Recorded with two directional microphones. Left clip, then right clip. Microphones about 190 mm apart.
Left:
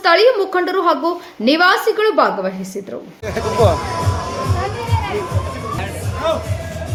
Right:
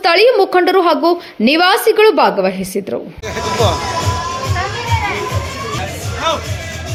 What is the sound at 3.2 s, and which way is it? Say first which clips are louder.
Speech: left 2 dB; 65° left (ahead or behind).